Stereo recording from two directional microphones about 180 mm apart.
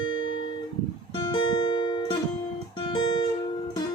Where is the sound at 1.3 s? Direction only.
25° left (ahead or behind).